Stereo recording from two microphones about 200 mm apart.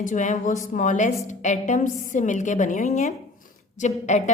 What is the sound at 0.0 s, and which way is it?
A woman's voice, 40° left (ahead or behind).